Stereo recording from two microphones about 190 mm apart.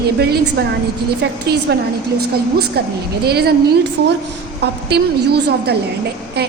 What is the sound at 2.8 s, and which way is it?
Speech, 60° right (ahead or behind).